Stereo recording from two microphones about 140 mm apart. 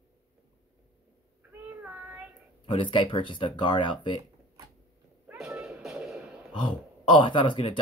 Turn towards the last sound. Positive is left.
turn(degrees=40)  # may be behind; listen again after turning